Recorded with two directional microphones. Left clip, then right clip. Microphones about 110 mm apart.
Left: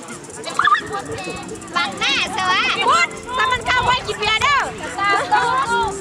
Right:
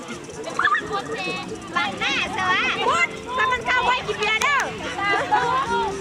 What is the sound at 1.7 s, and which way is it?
Speech, 40° left (ahead or behind).